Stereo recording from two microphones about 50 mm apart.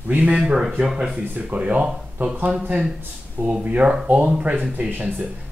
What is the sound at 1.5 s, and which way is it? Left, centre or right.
Speech, right.